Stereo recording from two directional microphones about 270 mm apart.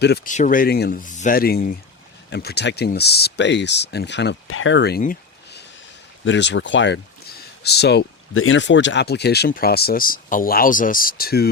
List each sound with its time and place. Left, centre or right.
0.0 s speech: left